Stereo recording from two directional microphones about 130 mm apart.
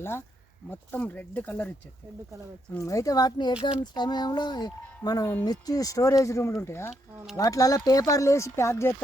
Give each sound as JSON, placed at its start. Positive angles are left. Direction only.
{"t": 0.0, "sound": "speech", "side_deg": 20}
{"t": 2.7, "sound": "speech", "side_deg": 25}